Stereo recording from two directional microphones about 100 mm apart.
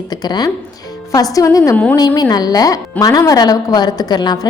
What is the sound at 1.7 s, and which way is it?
Speech, 15° left (ahead or behind).